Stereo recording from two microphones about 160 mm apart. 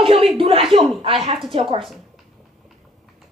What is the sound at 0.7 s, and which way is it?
A woman's voice, 35° right (ahead or behind).